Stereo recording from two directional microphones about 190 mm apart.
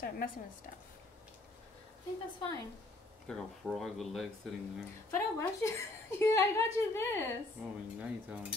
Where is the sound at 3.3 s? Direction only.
Centre (ahead or behind).